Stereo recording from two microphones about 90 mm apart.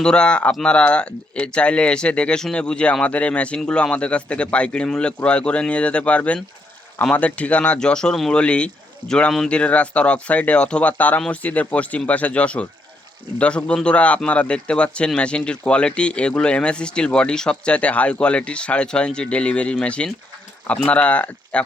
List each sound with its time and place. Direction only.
0.0 s speech: 10° left (ahead or behind)